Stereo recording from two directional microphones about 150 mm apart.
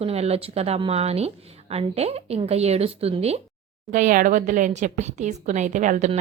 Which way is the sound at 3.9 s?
60° right (ahead or behind).